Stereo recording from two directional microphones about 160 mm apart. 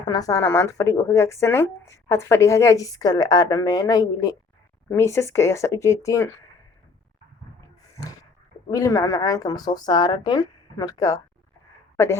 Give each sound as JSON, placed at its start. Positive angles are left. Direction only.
{"t": 0.1, "sound": "speech", "side_deg": 20}
{"t": 7.9, "sound": "a sound", "side_deg": 20}
{"t": 8.7, "sound": "speech", "side_deg": 20}